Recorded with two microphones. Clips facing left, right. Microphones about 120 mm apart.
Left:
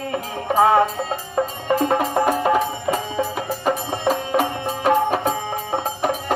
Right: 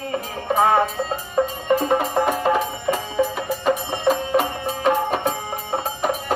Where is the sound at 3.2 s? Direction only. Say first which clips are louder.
Right 1 dB; 15° left (ahead or behind).